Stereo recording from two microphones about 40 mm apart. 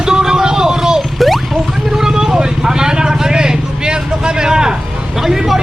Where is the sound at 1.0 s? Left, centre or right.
Centre.